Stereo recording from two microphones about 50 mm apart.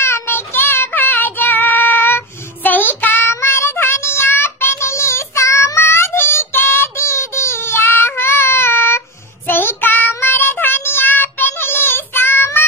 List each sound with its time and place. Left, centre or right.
0.0 s child singing: left
3.3 s child singing: left